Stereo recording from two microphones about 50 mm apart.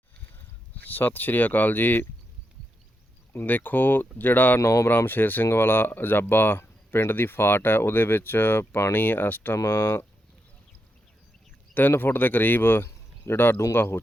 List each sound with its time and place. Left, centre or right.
0.3 s speech: left
3.4 s speech: left
9.6 s speech: left
11.7 s speech: left